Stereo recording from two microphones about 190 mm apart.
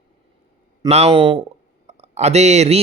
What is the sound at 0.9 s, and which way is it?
A man's voice, 30° right (ahead or behind).